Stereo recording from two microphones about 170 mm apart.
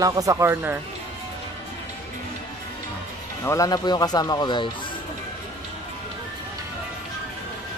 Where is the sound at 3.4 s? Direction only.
20° left (ahead or behind).